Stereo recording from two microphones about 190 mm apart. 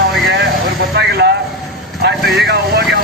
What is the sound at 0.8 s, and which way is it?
Vehicle, 60° right (ahead or behind).